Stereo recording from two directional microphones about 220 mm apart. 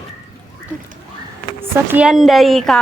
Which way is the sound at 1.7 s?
10° right (ahead or behind).